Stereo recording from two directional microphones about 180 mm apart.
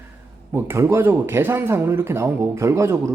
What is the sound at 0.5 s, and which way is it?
Speech, 15° right (ahead or behind).